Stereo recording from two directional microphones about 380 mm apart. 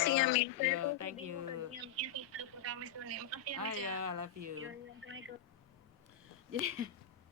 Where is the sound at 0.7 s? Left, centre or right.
Right.